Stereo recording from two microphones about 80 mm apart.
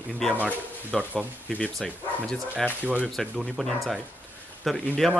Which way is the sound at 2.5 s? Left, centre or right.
Centre.